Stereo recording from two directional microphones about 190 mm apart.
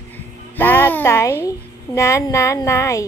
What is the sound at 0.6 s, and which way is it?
Speech, 10° left (ahead or behind).